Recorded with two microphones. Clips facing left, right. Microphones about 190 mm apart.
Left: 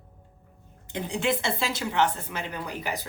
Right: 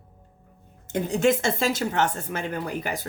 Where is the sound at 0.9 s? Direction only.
45° right (ahead or behind).